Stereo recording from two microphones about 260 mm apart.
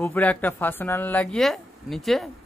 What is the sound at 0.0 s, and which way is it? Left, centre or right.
Speech, centre.